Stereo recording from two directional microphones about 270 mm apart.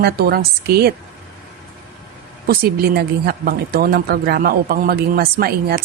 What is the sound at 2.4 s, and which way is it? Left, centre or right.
A woman's voice, right.